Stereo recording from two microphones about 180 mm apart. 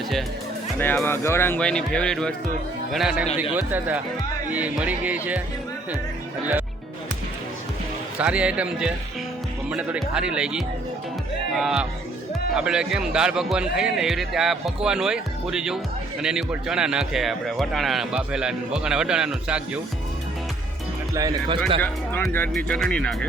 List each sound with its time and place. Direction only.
0.8 s a man's voice: 10° left (ahead or behind); by 5.4 s 10° right (ahead or behind)
8.2 s a man's voice: 5° right (ahead or behind)
21.2 s speech: 20° right (ahead or behind)
21.8 s a man's voice: 10° left (ahead or behind)